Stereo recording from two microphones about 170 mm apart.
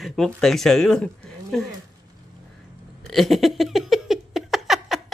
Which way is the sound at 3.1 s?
Centre (ahead or behind).